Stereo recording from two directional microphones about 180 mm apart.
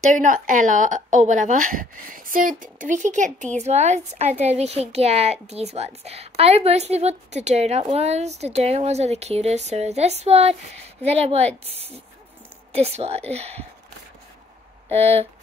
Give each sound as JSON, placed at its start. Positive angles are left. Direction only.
{"t": 0.1, "sound": "speech", "side_deg": -45}